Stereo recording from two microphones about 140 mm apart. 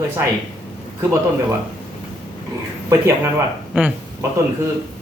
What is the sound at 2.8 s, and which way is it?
Speech, 20° right (ahead or behind).